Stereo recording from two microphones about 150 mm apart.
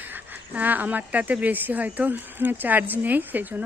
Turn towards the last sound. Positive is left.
turn(degrees=-10)  # may be behind; listen again after turning